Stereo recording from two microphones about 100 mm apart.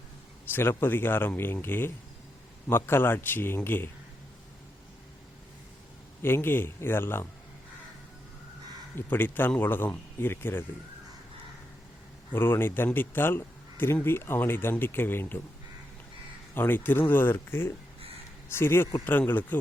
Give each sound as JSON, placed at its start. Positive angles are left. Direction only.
{"t": 0.5, "sound": "speech", "side_deg": 20}
{"t": 6.2, "sound": "speech", "side_deg": 25}
{"t": 9.0, "sound": "speech", "side_deg": 20}
{"t": 12.3, "sound": "speech", "side_deg": 20}
{"t": 16.6, "sound": "speech", "side_deg": 20}